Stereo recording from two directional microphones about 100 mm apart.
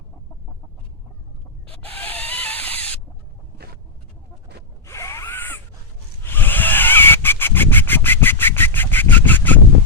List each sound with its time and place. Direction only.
1.8 s rodents: 15° left (ahead or behind)
4.9 s zipper: 30° left (ahead or behind)
6.2 s goose: 20° left (ahead or behind)